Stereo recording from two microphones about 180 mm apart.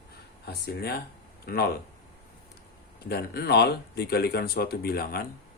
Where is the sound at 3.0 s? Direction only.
60° left (ahead or behind).